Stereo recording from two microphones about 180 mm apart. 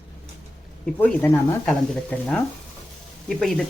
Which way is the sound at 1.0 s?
10° left (ahead or behind).